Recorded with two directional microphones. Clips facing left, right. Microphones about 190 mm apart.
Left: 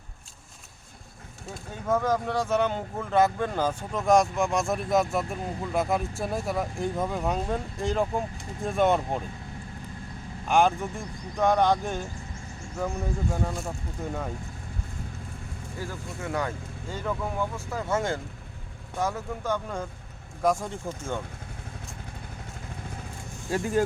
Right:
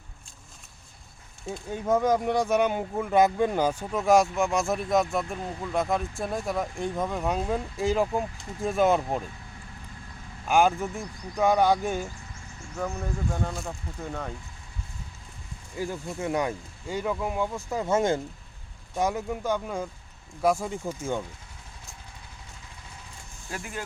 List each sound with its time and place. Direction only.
1.9 s speech: 15° right (ahead or behind)
10.4 s speech: 5° right (ahead or behind)
12.8 s speech: 5° left (ahead or behind)
15.8 s speech: 20° right (ahead or behind)
23.5 s speech: 30° left (ahead or behind)